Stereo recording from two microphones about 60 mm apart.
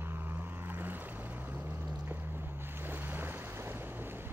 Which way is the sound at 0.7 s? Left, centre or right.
Right.